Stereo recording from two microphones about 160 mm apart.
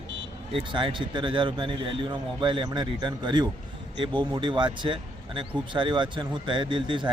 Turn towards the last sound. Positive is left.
turn(degrees=-30)  # may be behind; listen again after turning